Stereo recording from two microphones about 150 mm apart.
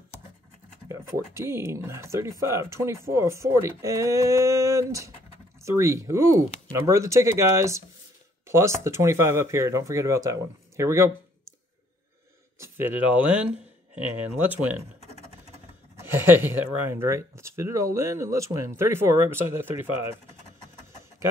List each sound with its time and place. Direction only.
0.8 s speech: 20° right (ahead or behind)
12.5 s speech: 15° right (ahead or behind)
16.0 s speech: 15° right (ahead or behind)